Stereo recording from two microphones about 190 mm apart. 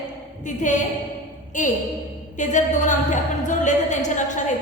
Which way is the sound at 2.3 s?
40° left (ahead or behind).